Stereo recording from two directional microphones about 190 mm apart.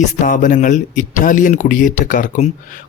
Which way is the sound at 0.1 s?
40° left (ahead or behind).